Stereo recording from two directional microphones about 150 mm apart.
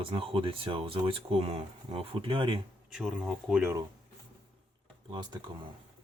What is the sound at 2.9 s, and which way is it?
Speech, 5° right (ahead or behind).